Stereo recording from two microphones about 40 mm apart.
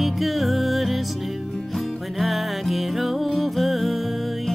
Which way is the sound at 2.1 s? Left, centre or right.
Centre.